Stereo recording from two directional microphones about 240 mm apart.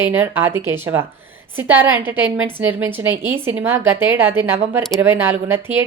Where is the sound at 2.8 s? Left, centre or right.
Centre.